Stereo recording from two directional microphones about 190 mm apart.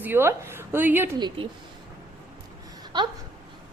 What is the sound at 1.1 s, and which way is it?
Speech, 25° right (ahead or behind).